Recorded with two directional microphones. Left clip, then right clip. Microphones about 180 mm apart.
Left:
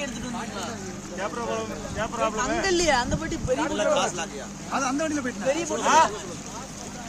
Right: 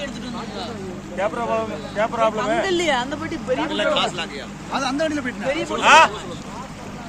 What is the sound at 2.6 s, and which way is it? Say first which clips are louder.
Speech: right 2 dB; 35° left (ahead or behind).